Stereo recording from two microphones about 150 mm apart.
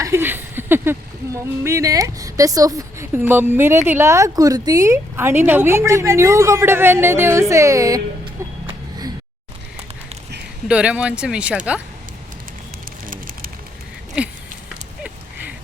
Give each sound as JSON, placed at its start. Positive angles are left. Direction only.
{"t": 0.0, "sound": "speech", "side_deg": -15}
{"t": 10.7, "sound": "speech", "side_deg": -5}
{"t": 14.2, "sound": "a sound", "side_deg": -10}